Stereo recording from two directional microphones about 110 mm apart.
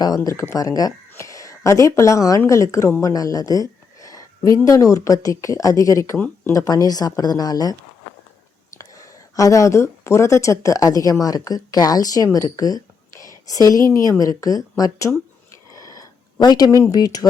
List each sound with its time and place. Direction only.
0.3 s a woman's voice: 30° left (ahead or behind)
6.1 s speech: 15° left (ahead or behind)
6.5 s speech: 30° left (ahead or behind)
8.8 s speech: 30° left (ahead or behind)
15.7 s a sound: 35° left (ahead or behind)
16.7 s speech: 30° left (ahead or behind)